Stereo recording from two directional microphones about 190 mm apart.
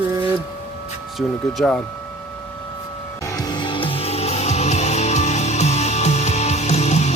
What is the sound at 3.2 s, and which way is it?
Music, 20° left (ahead or behind).